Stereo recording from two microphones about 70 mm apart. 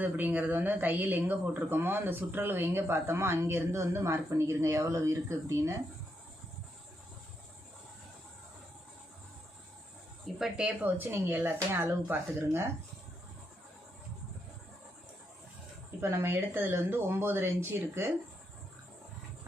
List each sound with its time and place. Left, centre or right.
0.0 s speech: right
10.6 s speech: centre
10.9 s speech: right
16.0 s speech: right